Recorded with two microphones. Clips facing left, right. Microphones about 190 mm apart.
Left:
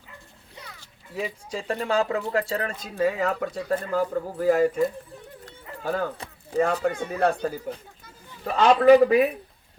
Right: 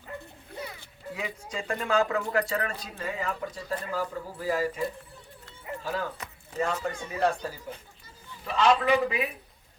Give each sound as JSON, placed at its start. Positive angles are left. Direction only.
{"t": 1.1, "sound": "speech", "side_deg": 30}
{"t": 3.0, "sound": "speech", "side_deg": 70}
{"t": 5.5, "sound": "dog", "side_deg": 55}
{"t": 6.8, "sound": "speech", "side_deg": 60}
{"t": 8.4, "sound": "a man's voice", "side_deg": 45}